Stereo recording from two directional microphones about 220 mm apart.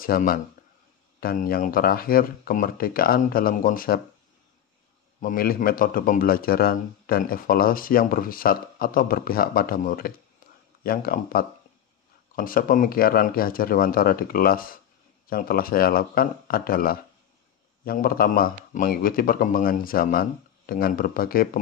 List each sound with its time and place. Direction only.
0.0 s a man's voice: 40° left (ahead or behind)
5.2 s a man's voice: 40° left (ahead or behind)